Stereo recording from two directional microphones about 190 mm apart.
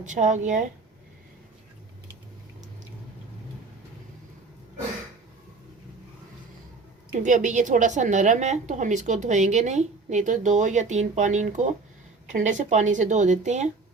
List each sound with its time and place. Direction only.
0.0 s a woman's voice: 40° right (ahead or behind)
7.1 s a woman's voice: 40° right (ahead or behind)